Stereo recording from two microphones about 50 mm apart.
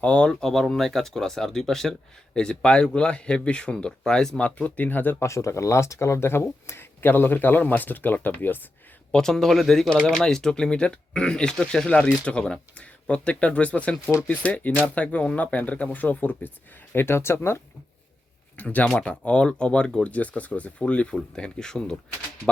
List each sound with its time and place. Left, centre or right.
0.0 s speech: left
0.3 s speech: centre
4.4 s speech: left
5.2 s speech: left
9.1 s speech: centre; by 16.5 s left
16.9 s speech: left
18.5 s speech: left; by 21.9 s centre